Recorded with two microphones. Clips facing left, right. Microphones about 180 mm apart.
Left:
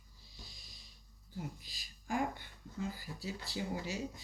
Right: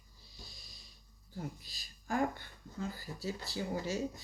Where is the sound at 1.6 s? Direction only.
15° left (ahead or behind).